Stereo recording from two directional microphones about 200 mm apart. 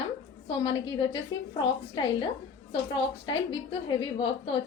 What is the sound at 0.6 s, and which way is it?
Speech, 20° left (ahead or behind).